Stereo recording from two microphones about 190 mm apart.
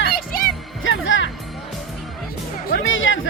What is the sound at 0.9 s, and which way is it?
Music, 90° left.